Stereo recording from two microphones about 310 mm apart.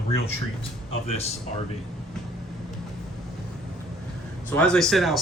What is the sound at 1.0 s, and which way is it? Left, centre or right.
Speech, centre.